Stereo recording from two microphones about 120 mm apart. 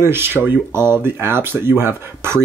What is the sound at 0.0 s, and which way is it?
Speech, 20° right (ahead or behind).